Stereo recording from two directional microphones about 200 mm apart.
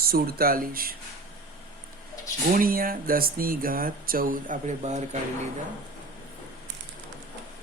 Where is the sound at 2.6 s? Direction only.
45° right (ahead or behind).